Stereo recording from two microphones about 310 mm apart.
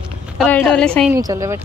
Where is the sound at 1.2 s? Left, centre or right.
Centre.